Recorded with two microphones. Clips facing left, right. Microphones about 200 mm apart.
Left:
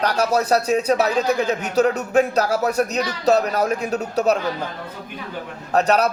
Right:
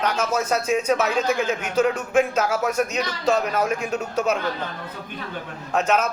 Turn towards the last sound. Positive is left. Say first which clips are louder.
# left 4 dB
turn(degrees=35)  # may be behind; listen again after turning